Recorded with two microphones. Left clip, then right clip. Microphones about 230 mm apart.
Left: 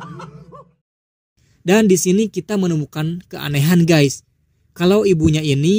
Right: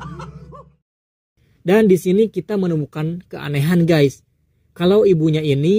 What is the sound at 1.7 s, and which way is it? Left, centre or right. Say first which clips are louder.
Speech: even; left.